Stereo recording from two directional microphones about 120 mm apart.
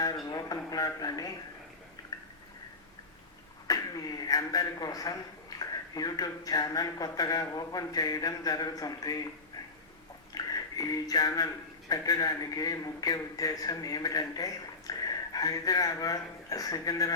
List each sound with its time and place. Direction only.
0.3 s a man's voice: 30° left (ahead or behind)
3.7 s a man's voice: 30° left (ahead or behind)
10.3 s a man's voice: 30° left (ahead or behind)